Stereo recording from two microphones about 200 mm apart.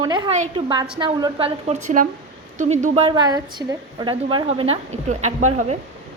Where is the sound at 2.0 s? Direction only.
40° right (ahead or behind).